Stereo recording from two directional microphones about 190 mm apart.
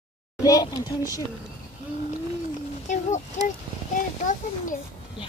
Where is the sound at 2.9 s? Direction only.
40° left (ahead or behind).